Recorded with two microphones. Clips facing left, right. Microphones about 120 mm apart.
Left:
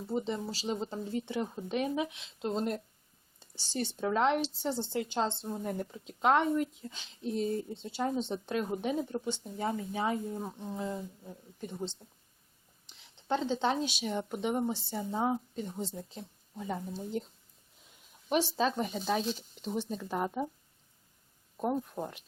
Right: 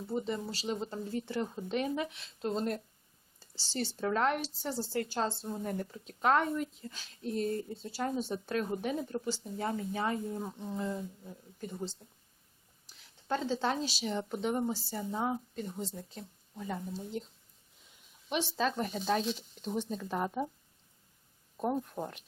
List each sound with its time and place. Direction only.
0.1 s speech: centre (ahead or behind)
3.8 s speech: centre (ahead or behind)
6.1 s speech: 20° left (ahead or behind)
6.3 s speech: 5° left (ahead or behind)
13.2 s speech: centre (ahead or behind)
18.3 s speech: centre (ahead or behind)
21.6 s speech: 5° left (ahead or behind)